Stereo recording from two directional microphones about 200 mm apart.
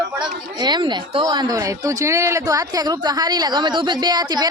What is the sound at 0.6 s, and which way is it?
Speech, 20° right (ahead or behind).